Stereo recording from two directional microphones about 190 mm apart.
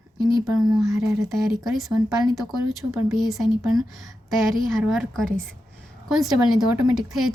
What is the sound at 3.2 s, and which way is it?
Speech, centre (ahead or behind).